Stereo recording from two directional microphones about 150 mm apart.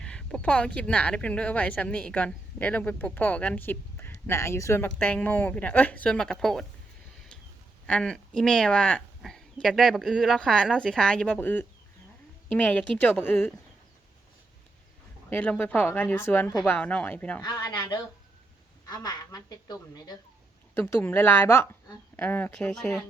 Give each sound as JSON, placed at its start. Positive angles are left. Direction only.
{"t": 0.0, "sound": "speech", "side_deg": 5}
{"t": 7.9, "sound": "speech", "side_deg": 5}
{"t": 15.3, "sound": "speech", "side_deg": 10}
{"t": 17.4, "sound": "a woman's voice", "side_deg": 30}
{"t": 20.7, "sound": "speech", "side_deg": 10}